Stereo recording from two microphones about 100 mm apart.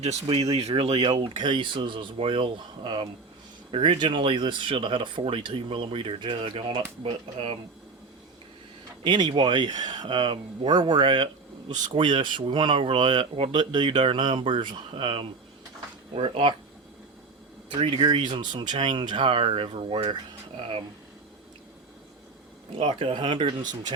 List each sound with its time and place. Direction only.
0.0 s speech: 85° right
1.4 s speech: 50° right (ahead or behind)
9.0 s speech: 50° right (ahead or behind)
17.7 s speech: 65° right (ahead or behind)
22.8 s speech: 65° right (ahead or behind)